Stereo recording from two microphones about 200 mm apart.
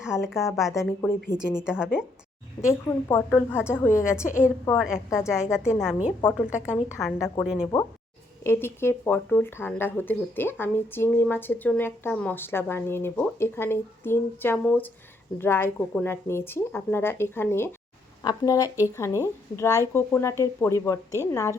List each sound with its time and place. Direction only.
0.3 s a woman's voice: centre (ahead or behind)
0.7 s speech: 15° left (ahead or behind)
1.4 s a woman's voice: 5° right (ahead or behind)
2.6 s speech: 15° left (ahead or behind)
4.8 s a woman's voice: centre (ahead or behind)
5.0 s speech: 15° left (ahead or behind)
6.3 s a woman's voice: 5° right (ahead or behind)
6.7 s speech: 15° left (ahead or behind)